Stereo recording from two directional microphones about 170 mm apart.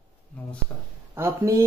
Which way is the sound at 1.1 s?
15° right (ahead or behind).